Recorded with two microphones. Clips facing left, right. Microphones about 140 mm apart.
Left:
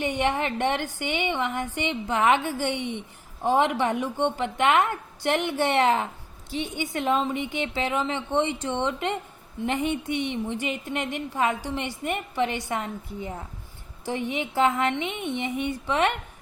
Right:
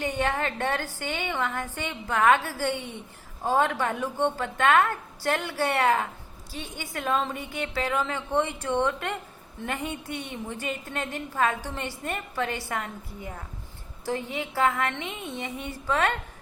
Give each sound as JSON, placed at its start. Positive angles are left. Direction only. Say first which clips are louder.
{"t": 0.2, "sound": "a woman's voice", "louder": "left 3 dB", "side_deg": 20}